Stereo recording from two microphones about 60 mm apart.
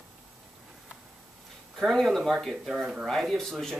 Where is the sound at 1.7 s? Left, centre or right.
Centre.